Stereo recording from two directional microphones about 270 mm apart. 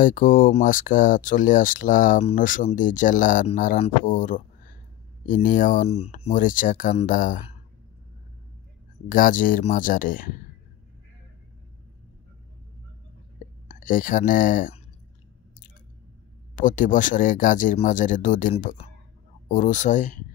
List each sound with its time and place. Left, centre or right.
0.0 s speech: left
9.1 s speech: left
13.7 s speech: left
16.5 s speech: left